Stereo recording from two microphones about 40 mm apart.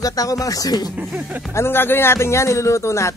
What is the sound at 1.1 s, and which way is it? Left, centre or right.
Speech, right.